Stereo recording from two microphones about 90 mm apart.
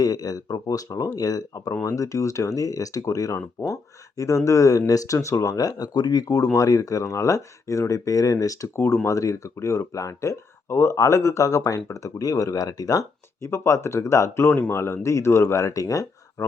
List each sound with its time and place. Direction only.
0.0 s speech: 45° left (ahead or behind)
8.7 s speech: 25° left (ahead or behind)